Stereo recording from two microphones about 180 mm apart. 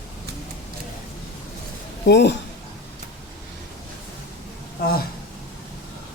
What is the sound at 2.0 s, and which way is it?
Speech, 75° left (ahead or behind).